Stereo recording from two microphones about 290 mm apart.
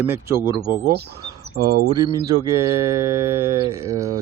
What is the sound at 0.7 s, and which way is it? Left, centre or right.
Speech, right.